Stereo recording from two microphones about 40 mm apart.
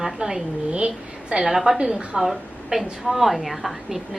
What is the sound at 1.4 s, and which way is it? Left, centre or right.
A woman's voice, centre.